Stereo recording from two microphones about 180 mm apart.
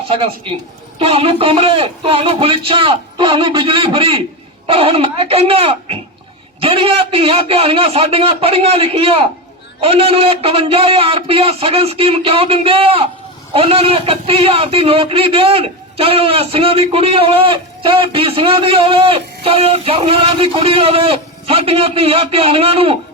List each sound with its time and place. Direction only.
0.9 s a man's voice: 30° right (ahead or behind)